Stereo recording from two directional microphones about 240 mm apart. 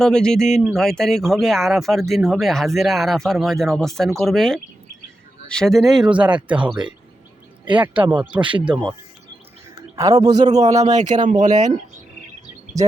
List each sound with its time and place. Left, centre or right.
0.0 s speech: centre
8.4 s speech: right
9.9 s a man's voice: centre
10.8 s speech: right
12.8 s speech: centre